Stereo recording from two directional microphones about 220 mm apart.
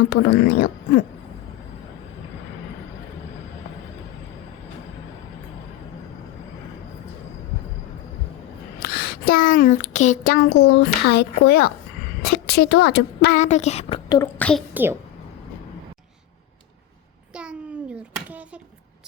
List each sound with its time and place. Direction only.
0.0 s speech: 45° left (ahead or behind)
8.8 s a woman's voice: 40° left (ahead or behind)
13.3 s speech: 30° left (ahead or behind)
14.3 s a woman's voice: 5° left (ahead or behind)
14.7 s a child's voice: 10° right (ahead or behind)
17.3 s a sound: 5° right (ahead or behind)